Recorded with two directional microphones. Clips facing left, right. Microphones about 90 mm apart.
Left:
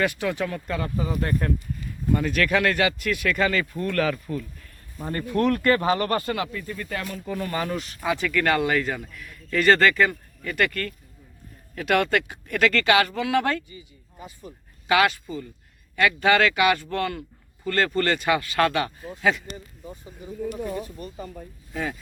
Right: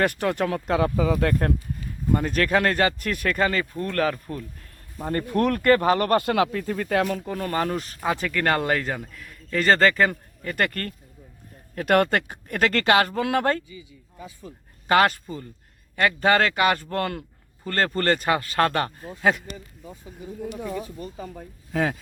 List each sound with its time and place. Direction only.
0.0 s speech: 50° right (ahead or behind); by 0.9 s 80° right
0.9 s speech: 90° right
2.1 s speech: 35° right (ahead or behind)
4.9 s speech: 50° right (ahead or behind); by 7.2 s 85° right
7.3 s speech: 45° right (ahead or behind)
14.8 s speech: 45° right (ahead or behind)
21.3 s speech: 85° right